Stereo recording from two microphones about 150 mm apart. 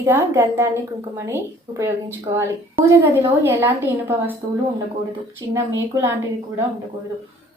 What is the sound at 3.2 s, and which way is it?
A woman's voice, 15° right (ahead or behind).